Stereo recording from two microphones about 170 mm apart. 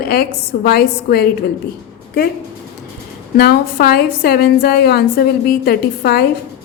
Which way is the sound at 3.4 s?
65° left (ahead or behind).